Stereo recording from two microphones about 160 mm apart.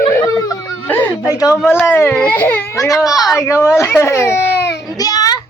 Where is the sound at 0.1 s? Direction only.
20° left (ahead or behind).